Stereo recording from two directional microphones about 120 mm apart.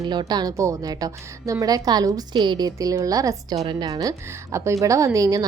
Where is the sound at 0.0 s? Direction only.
35° right (ahead or behind).